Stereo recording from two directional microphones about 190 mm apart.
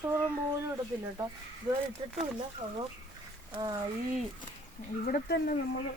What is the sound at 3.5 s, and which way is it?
Speech, 20° right (ahead or behind).